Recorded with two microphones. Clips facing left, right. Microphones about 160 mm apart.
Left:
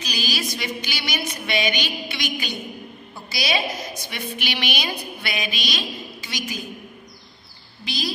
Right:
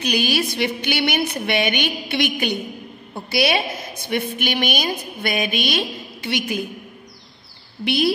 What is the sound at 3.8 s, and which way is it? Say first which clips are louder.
A woman's voice: right 7 dB; 55° right (ahead or behind).